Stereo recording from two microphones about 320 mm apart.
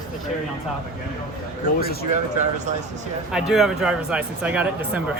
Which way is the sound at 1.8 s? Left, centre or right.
Left.